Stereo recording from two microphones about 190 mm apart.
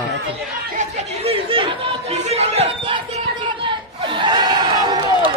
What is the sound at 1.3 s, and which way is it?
Chatter, 30° right (ahead or behind).